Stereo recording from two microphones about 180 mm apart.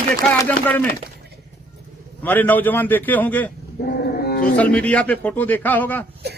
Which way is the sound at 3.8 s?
55° left (ahead or behind).